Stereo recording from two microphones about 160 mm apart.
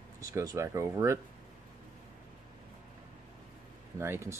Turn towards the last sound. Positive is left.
turn(degrees=-15)  # may be behind; listen again after turning